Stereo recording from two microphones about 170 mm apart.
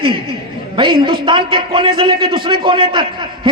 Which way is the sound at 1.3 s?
30° right (ahead or behind).